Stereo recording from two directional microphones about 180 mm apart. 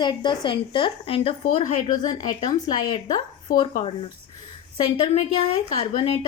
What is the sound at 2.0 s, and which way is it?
A woman's voice, 20° left (ahead or behind).